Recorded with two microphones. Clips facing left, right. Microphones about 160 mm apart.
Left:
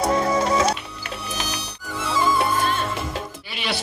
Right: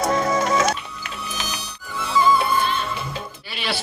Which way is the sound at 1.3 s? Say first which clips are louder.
Left 2 dB; 70° left (ahead or behind).